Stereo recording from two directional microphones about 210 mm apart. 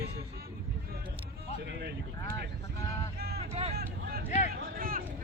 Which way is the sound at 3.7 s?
50° right (ahead or behind).